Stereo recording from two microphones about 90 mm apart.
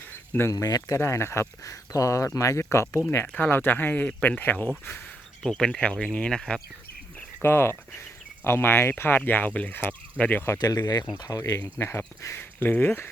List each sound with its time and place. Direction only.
0.5 s speech: 45° left (ahead or behind)
0.9 s speech: 30° left (ahead or behind)
5.4 s speech: 5° left (ahead or behind)
7.4 s speech: 25° left (ahead or behind)
10.6 s speech: 45° left (ahead or behind); by 12.5 s 30° left (ahead or behind)
12.5 s speech: 20° left (ahead or behind)